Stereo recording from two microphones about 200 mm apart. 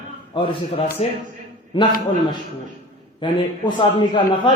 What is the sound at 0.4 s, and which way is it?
A man's voice, 25° left (ahead or behind).